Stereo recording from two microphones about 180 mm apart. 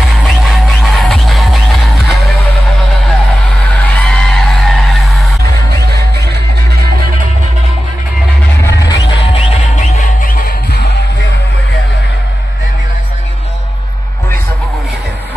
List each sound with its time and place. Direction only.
0.5 s music: centre (ahead or behind)
3.8 s music: 5° left (ahead or behind)
8.8 s music: 30° left (ahead or behind)